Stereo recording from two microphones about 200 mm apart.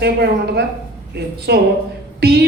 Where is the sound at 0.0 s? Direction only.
55° right (ahead or behind).